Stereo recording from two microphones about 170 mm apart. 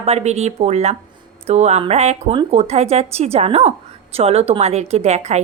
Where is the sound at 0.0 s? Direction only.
40° right (ahead or behind).